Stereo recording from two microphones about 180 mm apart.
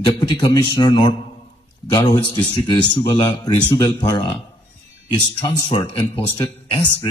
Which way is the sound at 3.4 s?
25° left (ahead or behind).